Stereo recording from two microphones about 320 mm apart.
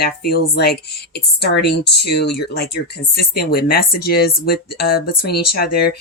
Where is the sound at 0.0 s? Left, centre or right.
Left.